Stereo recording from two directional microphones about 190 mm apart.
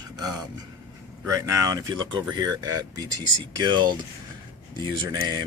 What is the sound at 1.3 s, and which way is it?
Speech, 15° right (ahead or behind).